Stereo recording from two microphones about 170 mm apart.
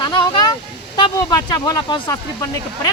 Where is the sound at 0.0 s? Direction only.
25° left (ahead or behind).